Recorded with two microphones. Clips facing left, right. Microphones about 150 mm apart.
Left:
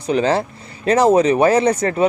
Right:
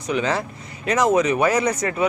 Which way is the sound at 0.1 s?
30° left (ahead or behind).